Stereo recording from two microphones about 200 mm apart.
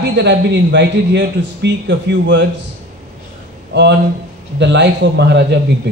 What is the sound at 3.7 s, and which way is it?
A man's voice, 60° right (ahead or behind).